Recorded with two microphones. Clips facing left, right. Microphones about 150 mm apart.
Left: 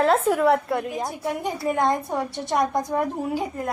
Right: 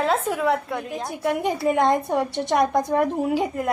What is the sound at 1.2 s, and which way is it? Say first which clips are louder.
Speech: right 8 dB; 65° right (ahead or behind).